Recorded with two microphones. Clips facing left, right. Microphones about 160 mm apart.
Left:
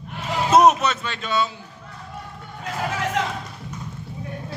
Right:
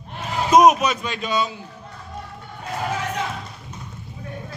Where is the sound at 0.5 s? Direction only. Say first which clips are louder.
Right 1 dB; 10° right (ahead or behind).